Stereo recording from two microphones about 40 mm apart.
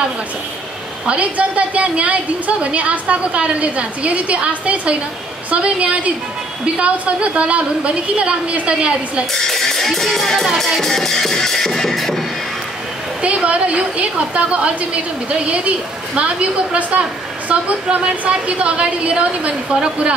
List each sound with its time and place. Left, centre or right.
1.0 s a woman's voice: right
9.3 s music: centre
13.2 s a woman's voice: right